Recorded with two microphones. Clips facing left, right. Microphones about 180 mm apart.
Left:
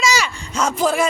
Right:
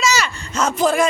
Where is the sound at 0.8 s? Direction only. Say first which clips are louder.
Right 2 dB; 10° left (ahead or behind).